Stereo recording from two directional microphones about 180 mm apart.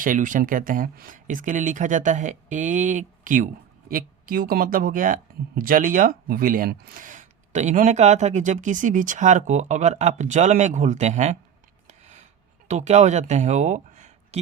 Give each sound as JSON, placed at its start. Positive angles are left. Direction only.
{"t": 0.0, "sound": "speech", "side_deg": -45}
{"t": 11.9, "sound": "a sound", "side_deg": -40}
{"t": 12.6, "sound": "speech", "side_deg": -40}